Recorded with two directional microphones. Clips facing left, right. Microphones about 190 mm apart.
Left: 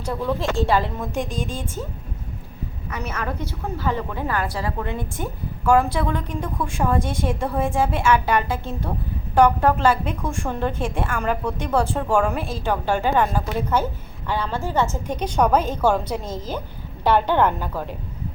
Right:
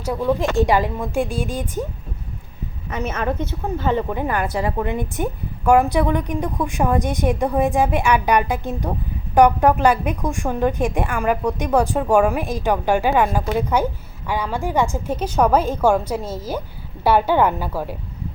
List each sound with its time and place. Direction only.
0.0 s a woman's voice: 10° right (ahead or behind)
2.9 s a woman's voice: 25° right (ahead or behind); by 17.9 s 10° right (ahead or behind)